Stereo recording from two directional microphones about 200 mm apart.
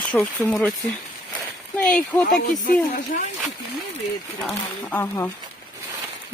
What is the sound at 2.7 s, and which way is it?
Speech, 45° left (ahead or behind).